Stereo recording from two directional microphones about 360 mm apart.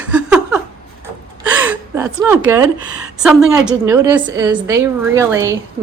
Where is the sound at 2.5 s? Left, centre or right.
Centre.